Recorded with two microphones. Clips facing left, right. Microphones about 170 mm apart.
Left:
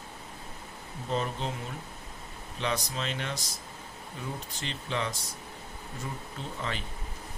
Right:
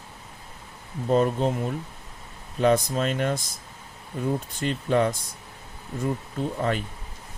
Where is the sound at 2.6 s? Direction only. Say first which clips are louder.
Right 11 dB; 50° right (ahead or behind).